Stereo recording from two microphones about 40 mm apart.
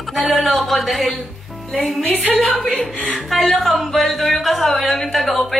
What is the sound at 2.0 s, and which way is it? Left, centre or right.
Speech, left.